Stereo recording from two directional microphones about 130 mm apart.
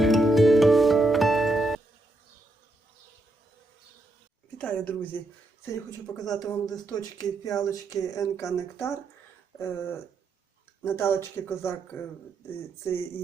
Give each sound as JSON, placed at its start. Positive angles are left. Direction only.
{"t": 0.0, "sound": "music", "side_deg": 0}
{"t": 4.5, "sound": "speech", "side_deg": 10}
{"t": 5.6, "sound": "speech", "side_deg": 25}